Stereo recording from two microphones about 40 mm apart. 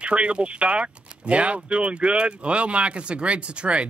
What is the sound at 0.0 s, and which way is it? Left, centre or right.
Speech, right.